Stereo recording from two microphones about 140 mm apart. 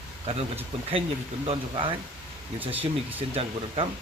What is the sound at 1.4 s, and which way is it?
Speech, 40° right (ahead or behind).